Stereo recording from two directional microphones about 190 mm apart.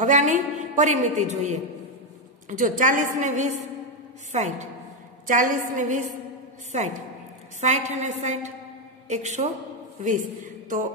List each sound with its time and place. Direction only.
0.0 s a woman's voice: 40° right (ahead or behind)
7.6 s a woman's voice: 40° right (ahead or behind)